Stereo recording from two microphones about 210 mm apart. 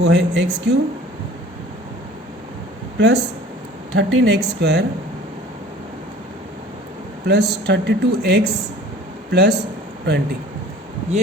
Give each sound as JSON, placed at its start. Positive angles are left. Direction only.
{"t": 0.0, "sound": "a woman's voice", "side_deg": -55}
{"t": 3.0, "sound": "speech", "side_deg": -55}
{"t": 7.3, "sound": "speech", "side_deg": -50}